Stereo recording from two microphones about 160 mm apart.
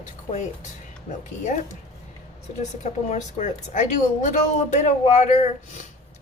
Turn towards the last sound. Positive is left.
turn(degrees=45)  # may be behind; listen again after turning